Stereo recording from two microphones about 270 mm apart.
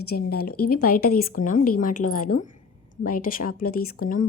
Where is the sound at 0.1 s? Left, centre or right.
Left.